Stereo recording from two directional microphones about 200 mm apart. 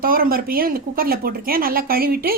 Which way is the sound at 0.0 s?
45° right (ahead or behind).